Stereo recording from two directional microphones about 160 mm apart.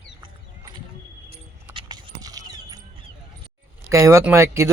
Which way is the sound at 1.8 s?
25° right (ahead or behind).